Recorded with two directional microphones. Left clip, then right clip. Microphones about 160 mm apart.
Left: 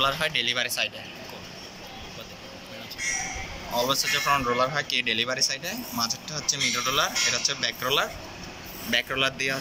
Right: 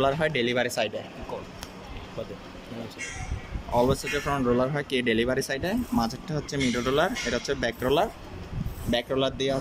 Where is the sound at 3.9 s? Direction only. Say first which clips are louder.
Left 5 dB; 50° right (ahead or behind).